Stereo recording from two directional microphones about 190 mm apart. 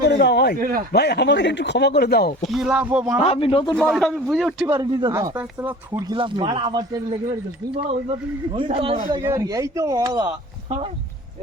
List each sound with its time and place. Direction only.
0.0 s a man's voice: 65° left (ahead or behind)
0.6 s speech: 50° right (ahead or behind)
0.9 s speech: 60° left (ahead or behind)
2.5 s speech: centre (ahead or behind)
3.2 s a man's voice: 30° left (ahead or behind)
3.7 s speech: centre (ahead or behind)
4.7 s speech: 20° right (ahead or behind)
8.5 s speech: 30° right (ahead or behind)
9.2 s speech: 15° right (ahead or behind)